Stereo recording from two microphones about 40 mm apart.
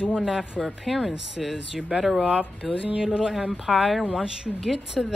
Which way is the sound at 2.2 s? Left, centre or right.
Right.